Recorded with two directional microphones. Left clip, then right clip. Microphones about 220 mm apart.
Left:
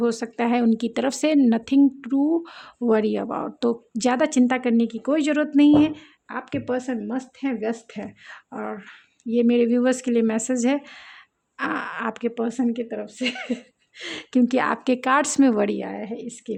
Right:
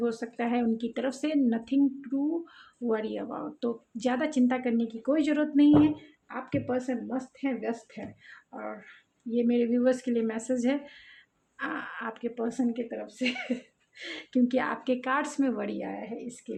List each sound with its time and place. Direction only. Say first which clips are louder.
0.0 s speech: left 7 dB; 50° left (ahead or behind)